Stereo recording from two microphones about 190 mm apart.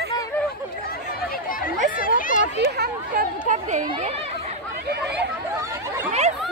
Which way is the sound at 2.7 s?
45° right (ahead or behind).